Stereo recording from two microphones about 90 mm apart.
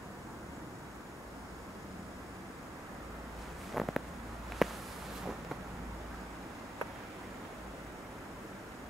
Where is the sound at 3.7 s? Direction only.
Centre (ahead or behind).